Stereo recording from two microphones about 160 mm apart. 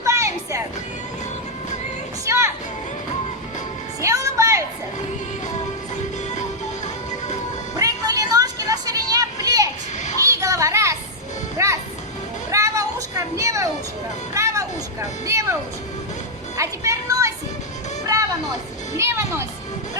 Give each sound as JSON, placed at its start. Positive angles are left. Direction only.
{"t": 0.0, "sound": "music", "side_deg": -20}
{"t": 2.2, "sound": "a sound", "side_deg": -15}
{"t": 4.0, "sound": "music", "side_deg": -20}
{"t": 7.8, "sound": "a sound", "side_deg": -20}
{"t": 10.3, "sound": "children playing", "side_deg": -20}
{"t": 11.5, "sound": "music", "side_deg": -20}
{"t": 12.5, "sound": "children playing", "side_deg": -20}
{"t": 14.3, "sound": "music", "side_deg": -20}
{"t": 16.6, "sound": "a sound", "side_deg": -20}
{"t": 18.9, "sound": "music", "side_deg": -15}